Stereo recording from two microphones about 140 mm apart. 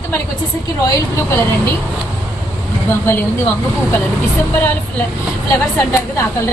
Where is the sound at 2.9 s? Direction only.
15° left (ahead or behind).